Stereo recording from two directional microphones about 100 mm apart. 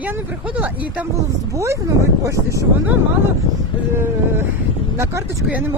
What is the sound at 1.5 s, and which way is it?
Speech, 30° right (ahead or behind).